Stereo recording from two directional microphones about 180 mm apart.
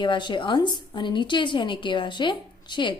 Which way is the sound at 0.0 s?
25° left (ahead or behind).